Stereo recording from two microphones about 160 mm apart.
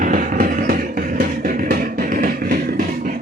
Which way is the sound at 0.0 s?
55° right (ahead or behind).